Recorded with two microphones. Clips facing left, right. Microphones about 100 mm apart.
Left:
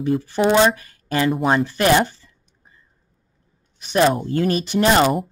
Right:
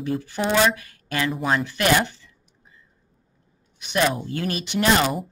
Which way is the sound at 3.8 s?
35° left (ahead or behind).